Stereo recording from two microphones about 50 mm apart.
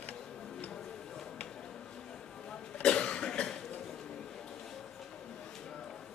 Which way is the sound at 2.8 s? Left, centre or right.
Centre.